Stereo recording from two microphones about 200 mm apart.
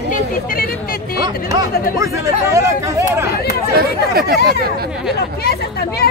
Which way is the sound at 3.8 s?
50° right (ahead or behind).